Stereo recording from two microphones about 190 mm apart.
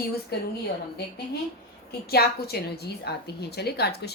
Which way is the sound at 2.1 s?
55° left (ahead or behind).